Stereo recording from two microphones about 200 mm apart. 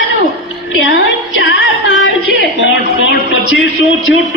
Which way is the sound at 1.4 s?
70° left (ahead or behind).